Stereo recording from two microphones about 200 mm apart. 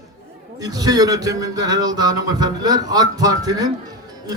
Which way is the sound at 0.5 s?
20° right (ahead or behind).